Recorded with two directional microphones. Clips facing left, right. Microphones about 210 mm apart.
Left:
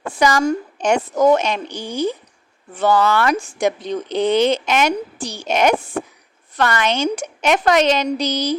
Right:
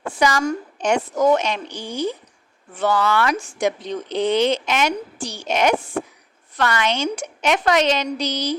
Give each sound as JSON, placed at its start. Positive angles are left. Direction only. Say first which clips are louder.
{"t": 0.1, "sound": "a woman's voice", "louder": "left 3 dB", "side_deg": 40}